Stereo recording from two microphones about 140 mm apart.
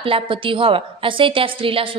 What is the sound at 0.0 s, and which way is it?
A woman's voice, 40° right (ahead or behind).